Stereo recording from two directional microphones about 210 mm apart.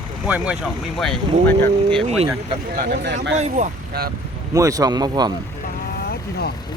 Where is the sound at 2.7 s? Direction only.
50° right (ahead or behind).